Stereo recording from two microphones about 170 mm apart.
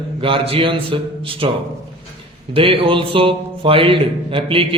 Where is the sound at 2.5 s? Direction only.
30° right (ahead or behind).